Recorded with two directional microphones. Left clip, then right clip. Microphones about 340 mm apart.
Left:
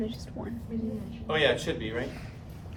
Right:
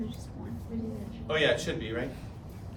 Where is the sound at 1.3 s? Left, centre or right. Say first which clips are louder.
Left 1 dB; centre.